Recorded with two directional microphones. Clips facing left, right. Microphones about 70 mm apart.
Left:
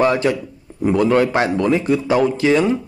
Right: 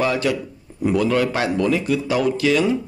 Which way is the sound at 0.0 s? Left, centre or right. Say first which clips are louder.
Left 4 dB; left.